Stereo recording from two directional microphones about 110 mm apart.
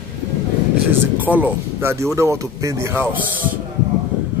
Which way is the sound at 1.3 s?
15° right (ahead or behind).